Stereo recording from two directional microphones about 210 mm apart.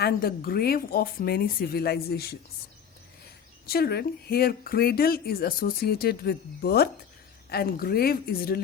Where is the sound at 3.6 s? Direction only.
50° left (ahead or behind).